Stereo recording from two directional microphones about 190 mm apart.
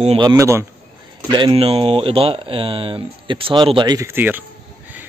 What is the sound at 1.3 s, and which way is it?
Speech, 25° right (ahead or behind).